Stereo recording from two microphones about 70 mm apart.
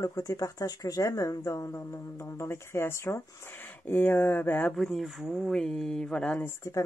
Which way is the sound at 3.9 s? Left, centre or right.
Left.